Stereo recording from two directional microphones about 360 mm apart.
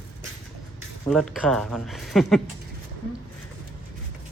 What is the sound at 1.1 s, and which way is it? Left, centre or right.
Speech, centre.